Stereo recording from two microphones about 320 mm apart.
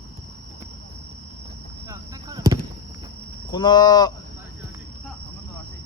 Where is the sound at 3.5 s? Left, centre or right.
Centre.